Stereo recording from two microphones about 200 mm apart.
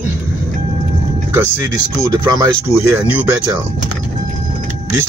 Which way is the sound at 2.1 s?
20° right (ahead or behind).